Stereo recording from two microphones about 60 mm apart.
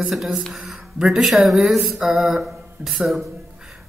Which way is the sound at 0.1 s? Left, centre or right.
Centre.